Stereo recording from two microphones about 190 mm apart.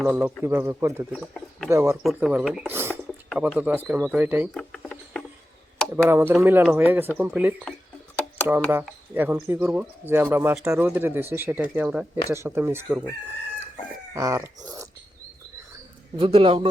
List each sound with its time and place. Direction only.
0.0 s speech: 10° right (ahead or behind)
1.1 s speech: centre (ahead or behind)
1.7 s speech: 15° right (ahead or behind)
2.7 s a sound: 10° right (ahead or behind)
3.2 s speech: 5° right (ahead or behind)
4.5 s a sound: 5° left (ahead or behind)
6.1 s speech: 15° right (ahead or behind)
8.7 s speech: 10° right (ahead or behind)
14.1 s speech: 15° right (ahead or behind)
16.1 s a man's voice: 30° right (ahead or behind)